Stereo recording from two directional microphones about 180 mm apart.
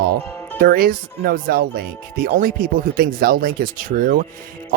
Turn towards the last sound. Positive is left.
turn(degrees=-50)  # may be behind; listen again after turning